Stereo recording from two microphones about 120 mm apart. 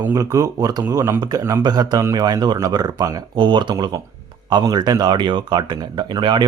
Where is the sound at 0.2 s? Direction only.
25° right (ahead or behind).